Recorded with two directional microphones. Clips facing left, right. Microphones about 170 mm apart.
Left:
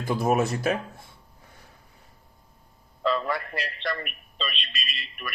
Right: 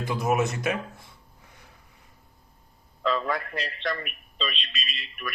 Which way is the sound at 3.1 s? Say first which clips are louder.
Even; 5° left (ahead or behind).